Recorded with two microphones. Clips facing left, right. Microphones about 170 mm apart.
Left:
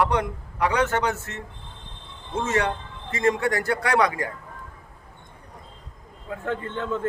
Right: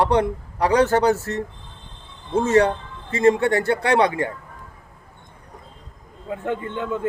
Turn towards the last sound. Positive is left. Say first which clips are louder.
# right 2 dB
turn(degrees=-15)  # may be behind; listen again after turning